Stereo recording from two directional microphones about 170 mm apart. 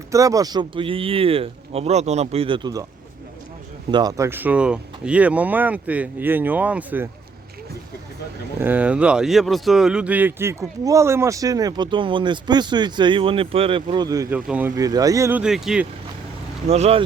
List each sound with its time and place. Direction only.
0.1 s speech: 20° right (ahead or behind)
3.9 s speech: 20° right (ahead or behind)
8.6 s a man's voice: 10° right (ahead or behind)
14.3 s speech: 10° right (ahead or behind)
14.8 s speech: 20° right (ahead or behind); by 15.9 s 5° right (ahead or behind)
16.6 s speech: 40° right (ahead or behind)